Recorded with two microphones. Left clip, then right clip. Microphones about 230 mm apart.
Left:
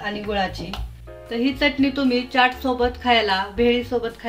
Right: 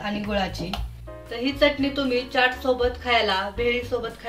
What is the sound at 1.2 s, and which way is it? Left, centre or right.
A woman's voice, left.